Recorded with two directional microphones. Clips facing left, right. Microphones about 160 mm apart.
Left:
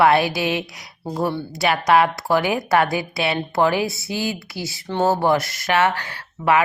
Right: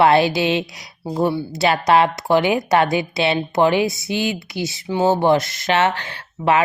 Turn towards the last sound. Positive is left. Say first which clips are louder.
# right 1 dB
turn(degrees=-25)  # may be behind; listen again after turning